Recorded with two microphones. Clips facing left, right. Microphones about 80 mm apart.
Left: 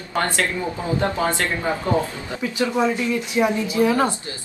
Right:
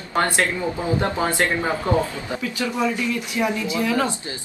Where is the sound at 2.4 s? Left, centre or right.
Left.